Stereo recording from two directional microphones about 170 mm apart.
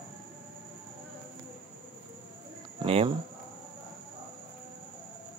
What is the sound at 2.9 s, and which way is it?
Speech, 35° right (ahead or behind).